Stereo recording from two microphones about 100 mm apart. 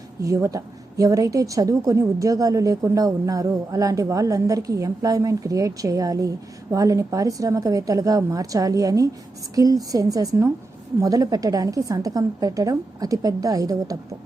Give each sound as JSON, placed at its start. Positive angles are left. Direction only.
{"t": 0.2, "sound": "a woman's voice", "side_deg": -30}